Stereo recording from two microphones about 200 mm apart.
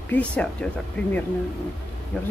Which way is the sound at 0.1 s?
5° left (ahead or behind).